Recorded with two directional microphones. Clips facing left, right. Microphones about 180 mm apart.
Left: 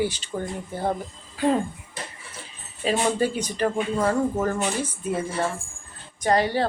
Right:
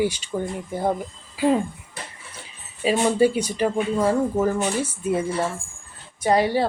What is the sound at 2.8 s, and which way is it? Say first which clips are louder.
Speech: right 4 dB; 10° right (ahead or behind).